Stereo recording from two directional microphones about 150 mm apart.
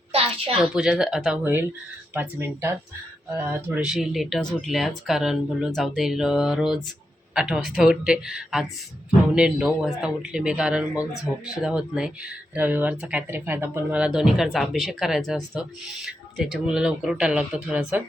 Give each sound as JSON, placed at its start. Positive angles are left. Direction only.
{"t": 0.1, "sound": "a sound", "side_deg": -40}
{"t": 0.6, "sound": "speech", "side_deg": -5}
{"t": 2.1, "sound": "speech", "side_deg": -15}
{"t": 3.8, "sound": "speech", "side_deg": 0}